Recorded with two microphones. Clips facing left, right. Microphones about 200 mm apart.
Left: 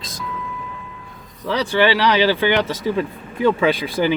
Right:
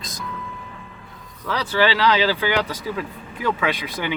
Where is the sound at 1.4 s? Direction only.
15° left (ahead or behind).